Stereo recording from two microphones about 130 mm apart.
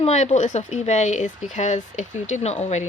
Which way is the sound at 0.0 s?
55° left (ahead or behind).